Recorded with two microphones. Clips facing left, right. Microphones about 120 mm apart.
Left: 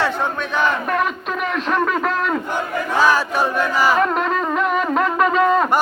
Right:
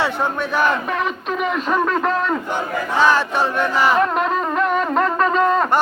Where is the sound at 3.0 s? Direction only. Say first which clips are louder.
Right 1 dB; 10° left (ahead or behind).